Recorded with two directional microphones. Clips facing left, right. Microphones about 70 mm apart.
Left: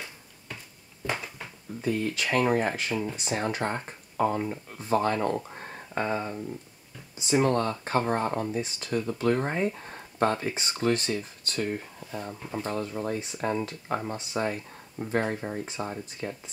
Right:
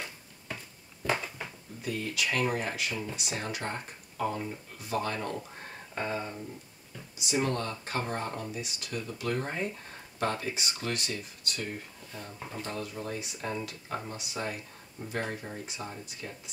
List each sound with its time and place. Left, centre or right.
1.8 s speech: left